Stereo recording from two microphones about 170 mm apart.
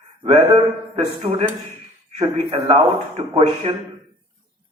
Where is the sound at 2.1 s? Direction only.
25° right (ahead or behind).